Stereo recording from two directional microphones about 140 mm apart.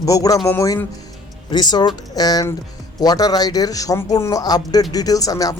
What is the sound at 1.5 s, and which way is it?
Speech, 30° left (ahead or behind).